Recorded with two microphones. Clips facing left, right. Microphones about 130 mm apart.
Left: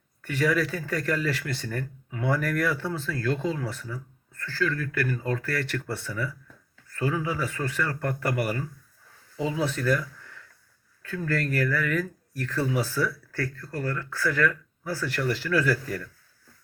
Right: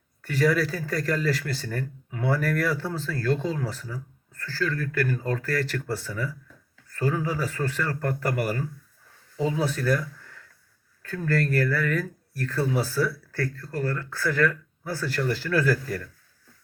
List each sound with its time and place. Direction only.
0.2 s speech: 35° right (ahead or behind)
11.0 s speech: 40° right (ahead or behind)